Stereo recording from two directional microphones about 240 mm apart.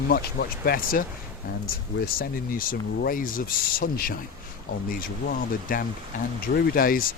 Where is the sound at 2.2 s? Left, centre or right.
Left.